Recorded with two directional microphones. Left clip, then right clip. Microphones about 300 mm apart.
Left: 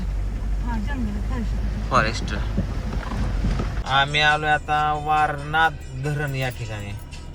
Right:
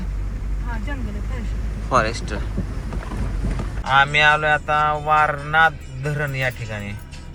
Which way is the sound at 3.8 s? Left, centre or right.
Centre.